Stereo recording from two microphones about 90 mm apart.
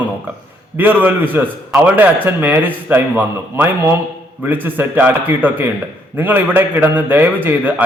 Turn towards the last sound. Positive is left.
turn(degrees=-20)  # may be behind; listen again after turning